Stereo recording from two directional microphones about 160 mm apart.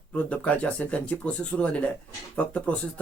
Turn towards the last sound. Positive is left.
turn(degrees=10)  # may be behind; listen again after turning